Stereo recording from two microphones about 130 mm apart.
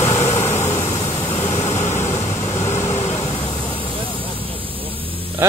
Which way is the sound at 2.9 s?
50° left (ahead or behind).